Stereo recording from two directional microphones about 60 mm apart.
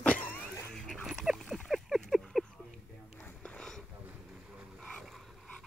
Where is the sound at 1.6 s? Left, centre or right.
Centre.